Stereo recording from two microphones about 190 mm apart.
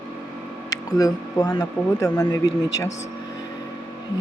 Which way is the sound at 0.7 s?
20° left (ahead or behind).